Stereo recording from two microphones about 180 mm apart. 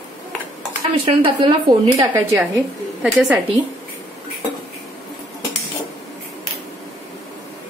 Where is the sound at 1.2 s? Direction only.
25° right (ahead or behind).